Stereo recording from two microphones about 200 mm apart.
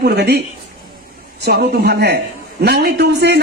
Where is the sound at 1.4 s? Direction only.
55° right (ahead or behind).